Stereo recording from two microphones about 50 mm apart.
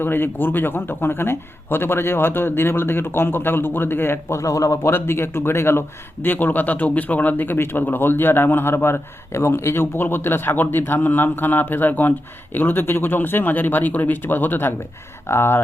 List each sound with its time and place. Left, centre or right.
0.0 s speech: left
4.4 s speech: left
4.9 s speech: left
6.2 s speech: left
15.3 s speech: left